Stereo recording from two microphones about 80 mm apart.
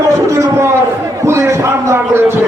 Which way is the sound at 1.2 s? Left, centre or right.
Right.